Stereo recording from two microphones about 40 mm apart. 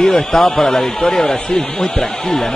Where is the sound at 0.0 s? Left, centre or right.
Centre.